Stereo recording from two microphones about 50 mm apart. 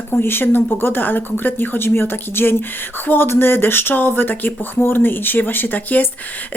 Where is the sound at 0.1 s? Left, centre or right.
Left.